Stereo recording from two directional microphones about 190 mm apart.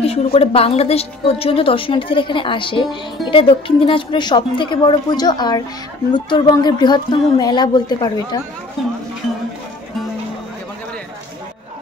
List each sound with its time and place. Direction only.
0.0 s a woman's voice: 30° left (ahead or behind)